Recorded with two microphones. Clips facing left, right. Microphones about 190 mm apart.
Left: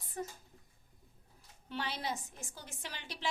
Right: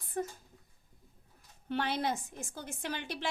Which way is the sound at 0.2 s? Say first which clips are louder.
Right 5 dB; 60° right (ahead or behind).